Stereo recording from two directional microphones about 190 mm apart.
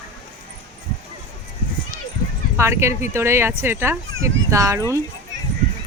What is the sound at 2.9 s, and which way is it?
Speech, 35° left (ahead or behind).